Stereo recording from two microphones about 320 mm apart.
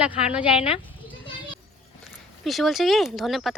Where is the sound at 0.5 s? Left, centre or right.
Centre.